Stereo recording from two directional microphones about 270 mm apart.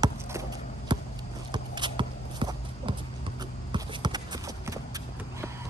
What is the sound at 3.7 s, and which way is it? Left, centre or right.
Clip-clop, centre.